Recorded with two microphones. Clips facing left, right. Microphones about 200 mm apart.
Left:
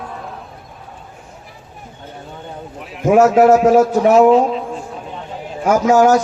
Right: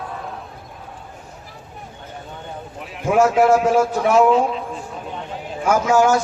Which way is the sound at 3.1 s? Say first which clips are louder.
Left 5 dB; 40° left (ahead or behind).